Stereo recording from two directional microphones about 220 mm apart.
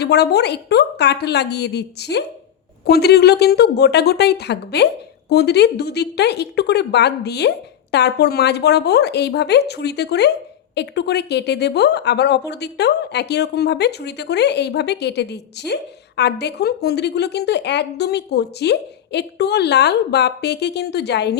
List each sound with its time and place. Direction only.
0.0 s speech: 50° left (ahead or behind)